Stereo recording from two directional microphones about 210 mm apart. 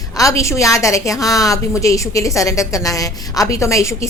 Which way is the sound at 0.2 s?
15° left (ahead or behind).